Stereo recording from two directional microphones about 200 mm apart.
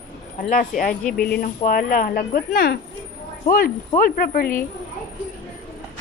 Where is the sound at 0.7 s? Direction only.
Centre (ahead or behind).